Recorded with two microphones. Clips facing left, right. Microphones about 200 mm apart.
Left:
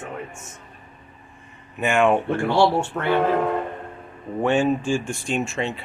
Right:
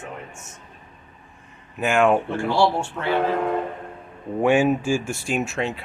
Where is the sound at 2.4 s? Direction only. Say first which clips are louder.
Left 3 dB; 65° left (ahead or behind).